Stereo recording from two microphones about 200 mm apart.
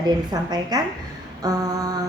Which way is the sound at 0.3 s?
20° right (ahead or behind).